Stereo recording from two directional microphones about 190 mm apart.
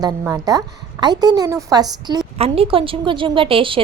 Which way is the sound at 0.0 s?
20° right (ahead or behind).